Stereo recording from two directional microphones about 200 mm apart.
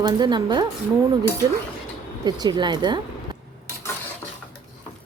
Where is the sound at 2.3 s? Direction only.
20° right (ahead or behind).